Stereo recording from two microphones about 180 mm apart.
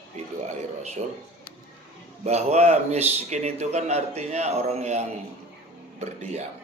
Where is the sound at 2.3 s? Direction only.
35° right (ahead or behind).